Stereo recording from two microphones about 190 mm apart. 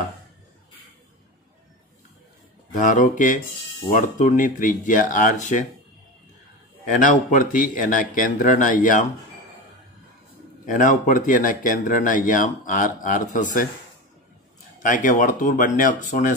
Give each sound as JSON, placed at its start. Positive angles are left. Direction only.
{"t": 2.8, "sound": "speech", "side_deg": 40}
{"t": 6.9, "sound": "speech", "side_deg": 45}
{"t": 10.7, "sound": "speech", "side_deg": 45}
{"t": 14.8, "sound": "speech", "side_deg": 45}